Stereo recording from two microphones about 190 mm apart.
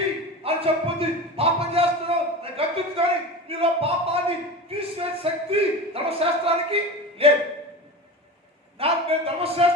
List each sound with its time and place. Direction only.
0.4 s a sound: 30° right (ahead or behind)
3.6 s speech: 30° right (ahead or behind)
8.8 s speech: 30° right (ahead or behind)